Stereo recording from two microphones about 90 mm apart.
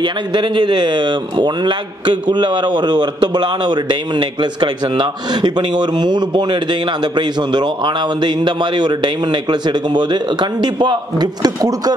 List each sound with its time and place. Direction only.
0.0 s a man's voice: 60° right (ahead or behind)